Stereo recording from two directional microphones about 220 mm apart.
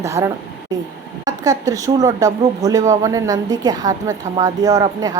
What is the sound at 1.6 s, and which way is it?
A woman's voice, 15° right (ahead or behind).